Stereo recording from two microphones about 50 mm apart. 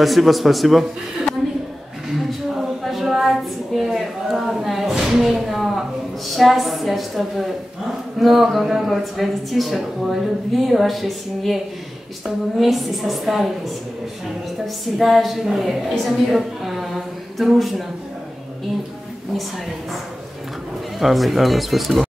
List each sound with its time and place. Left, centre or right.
0.0 s speech: centre
2.8 s a sound: centre
6.3 s speech: centre
15.0 s speech: centre
21.0 s speech: centre